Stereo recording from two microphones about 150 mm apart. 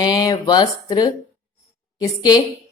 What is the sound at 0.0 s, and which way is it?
Speech, 30° left (ahead or behind).